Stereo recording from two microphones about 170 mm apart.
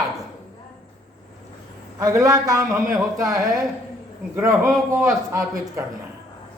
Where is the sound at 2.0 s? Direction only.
20° right (ahead or behind).